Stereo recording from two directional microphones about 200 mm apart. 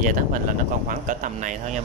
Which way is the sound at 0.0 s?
40° right (ahead or behind).